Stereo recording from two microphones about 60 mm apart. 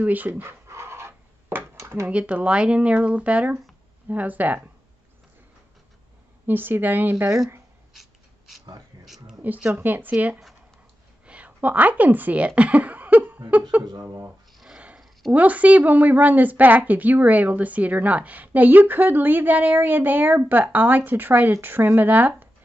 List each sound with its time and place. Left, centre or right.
0.0 s a woman's voice: right
0.3 s pant: right
1.8 s a sound: right
2.0 s a woman's voice: right
6.4 s speech: right
7.9 s a sound: centre
9.4 s a woman's voice: right
15.3 s a woman's voice: right